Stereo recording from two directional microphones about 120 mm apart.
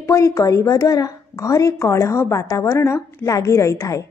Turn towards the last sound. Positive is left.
turn(degrees=25)  # may be behind; listen again after turning